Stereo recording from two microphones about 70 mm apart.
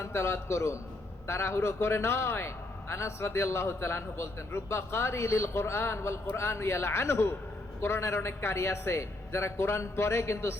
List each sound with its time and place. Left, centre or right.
0.0 s a man's voice: left